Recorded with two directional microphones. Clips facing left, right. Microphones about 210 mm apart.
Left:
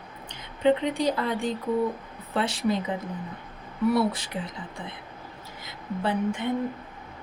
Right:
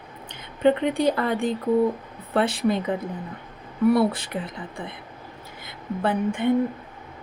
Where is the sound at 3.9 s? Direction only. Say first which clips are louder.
Right 3 dB; 55° right (ahead or behind).